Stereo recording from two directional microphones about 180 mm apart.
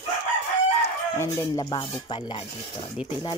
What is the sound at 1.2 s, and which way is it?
Speech, 20° left (ahead or behind).